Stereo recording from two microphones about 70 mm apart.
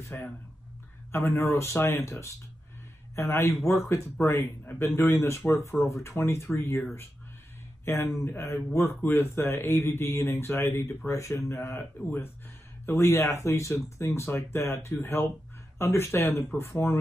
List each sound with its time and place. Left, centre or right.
0.1 s speech: left
7.8 s speech: left
12.8 s speech: left